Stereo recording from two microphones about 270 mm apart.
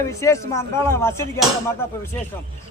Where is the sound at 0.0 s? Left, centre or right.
Centre.